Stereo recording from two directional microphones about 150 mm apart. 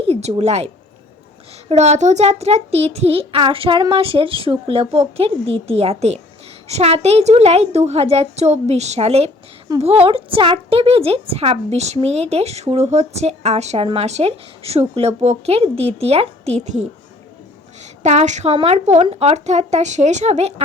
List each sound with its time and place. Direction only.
0.0 s a woman's voice: 45° right (ahead or behind)
1.7 s a woman's voice: 50° right (ahead or behind)